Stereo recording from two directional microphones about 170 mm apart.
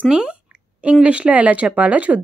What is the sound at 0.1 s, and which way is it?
A woman's voice, 5° right (ahead or behind).